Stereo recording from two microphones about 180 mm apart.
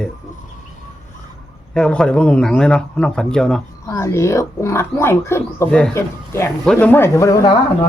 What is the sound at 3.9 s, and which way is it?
Speech, 15° left (ahead or behind).